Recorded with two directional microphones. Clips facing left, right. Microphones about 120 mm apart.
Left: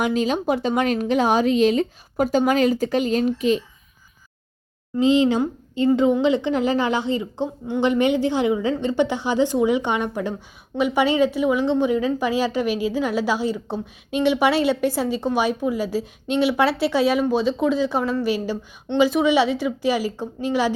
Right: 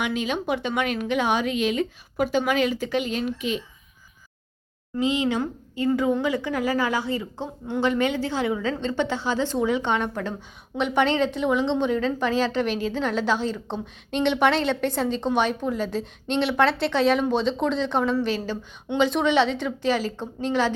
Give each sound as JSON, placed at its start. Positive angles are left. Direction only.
{"t": 0.0, "sound": "a woman's voice", "side_deg": 35}
{"t": 4.9, "sound": "a woman's voice", "side_deg": 30}